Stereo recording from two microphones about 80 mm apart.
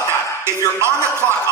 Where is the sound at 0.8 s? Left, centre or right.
Right.